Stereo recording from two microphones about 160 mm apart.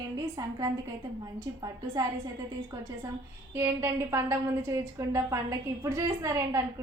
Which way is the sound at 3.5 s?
15° right (ahead or behind).